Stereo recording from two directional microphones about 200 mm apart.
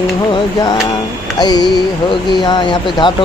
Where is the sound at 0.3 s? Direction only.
25° left (ahead or behind).